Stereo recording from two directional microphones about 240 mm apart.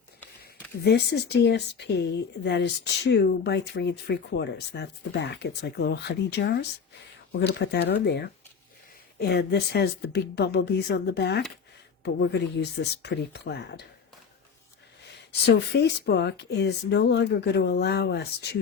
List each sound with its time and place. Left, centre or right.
0.9 s speech: left
15.3 s speech: left